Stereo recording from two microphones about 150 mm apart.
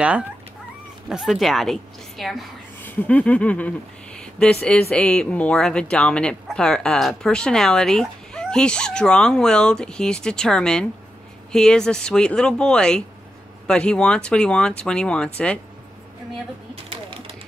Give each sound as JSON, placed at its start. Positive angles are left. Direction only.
{"t": 1.0, "sound": "a woman's voice", "side_deg": -5}
{"t": 2.8, "sound": "speech", "side_deg": 10}
{"t": 16.7, "sound": "typewriter", "side_deg": -40}